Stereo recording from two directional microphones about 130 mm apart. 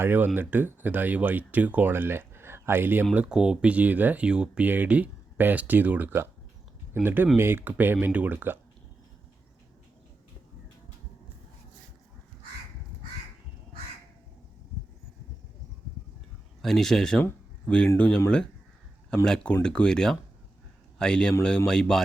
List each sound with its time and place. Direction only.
0.0 s speech: 15° right (ahead or behind)
16.6 s speech: 5° left (ahead or behind)
19.2 s speech: 5° left (ahead or behind)